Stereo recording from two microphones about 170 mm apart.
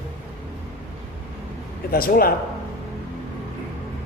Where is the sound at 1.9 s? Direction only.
60° left (ahead or behind).